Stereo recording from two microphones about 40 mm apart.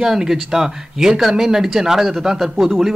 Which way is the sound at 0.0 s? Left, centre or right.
Centre.